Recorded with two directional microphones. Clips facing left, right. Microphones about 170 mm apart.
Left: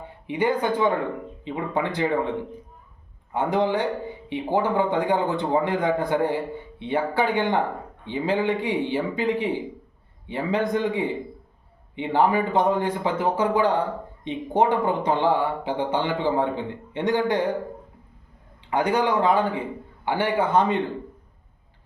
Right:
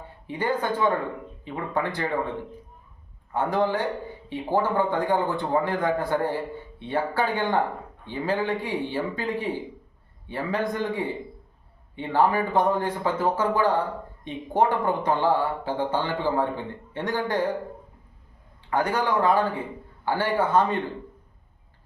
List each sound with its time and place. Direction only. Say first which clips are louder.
0.3 s speech: left 3 dB; 15° left (ahead or behind)
3.3 s speech: left 2 dB; 15° left (ahead or behind)
18.7 s speech: left 2 dB; 15° left (ahead or behind)